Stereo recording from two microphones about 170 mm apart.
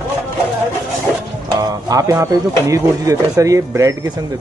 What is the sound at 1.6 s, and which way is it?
Music, 20° right (ahead or behind).